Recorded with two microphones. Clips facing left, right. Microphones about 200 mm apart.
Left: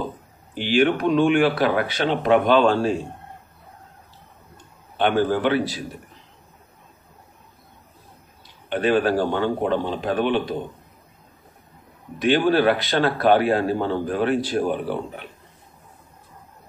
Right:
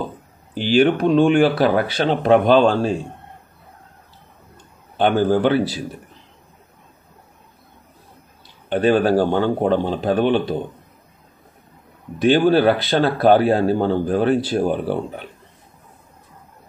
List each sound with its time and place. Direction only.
0.6 s speech: 35° right (ahead or behind)
4.9 s speech: 35° right (ahead or behind)
8.6 s speech: 35° right (ahead or behind)
12.2 s speech: 35° right (ahead or behind)